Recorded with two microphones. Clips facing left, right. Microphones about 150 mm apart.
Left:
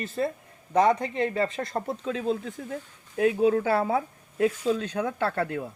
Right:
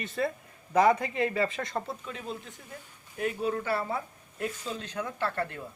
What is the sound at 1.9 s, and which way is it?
Speech, 90° left.